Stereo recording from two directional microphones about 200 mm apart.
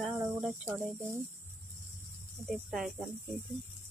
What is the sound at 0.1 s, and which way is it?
Speech, 10° right (ahead or behind).